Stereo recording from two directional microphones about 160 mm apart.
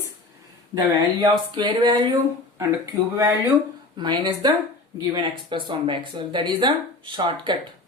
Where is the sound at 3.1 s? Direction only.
20° right (ahead or behind).